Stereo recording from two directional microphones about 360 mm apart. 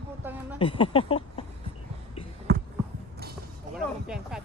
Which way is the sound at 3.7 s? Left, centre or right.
Centre.